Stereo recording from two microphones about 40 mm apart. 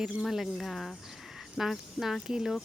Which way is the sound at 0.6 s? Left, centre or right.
Centre.